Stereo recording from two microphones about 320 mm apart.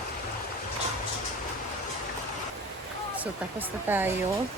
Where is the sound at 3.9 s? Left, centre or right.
Centre.